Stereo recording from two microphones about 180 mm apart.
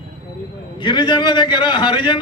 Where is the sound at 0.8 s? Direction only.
25° left (ahead or behind).